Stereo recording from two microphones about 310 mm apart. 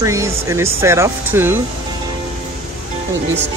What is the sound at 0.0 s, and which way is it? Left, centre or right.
Speech, centre.